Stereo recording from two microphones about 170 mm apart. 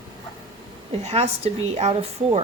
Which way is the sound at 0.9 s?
40° right (ahead or behind).